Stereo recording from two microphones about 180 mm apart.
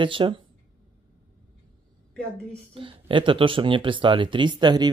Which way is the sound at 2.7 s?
30° right (ahead or behind).